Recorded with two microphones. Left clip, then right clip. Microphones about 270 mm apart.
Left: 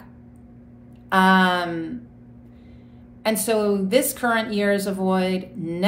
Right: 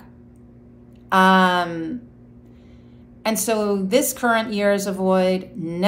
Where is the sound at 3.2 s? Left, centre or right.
Centre.